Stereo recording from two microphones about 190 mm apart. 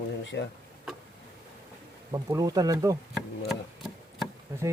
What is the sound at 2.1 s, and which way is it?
Speech, 20° right (ahead or behind).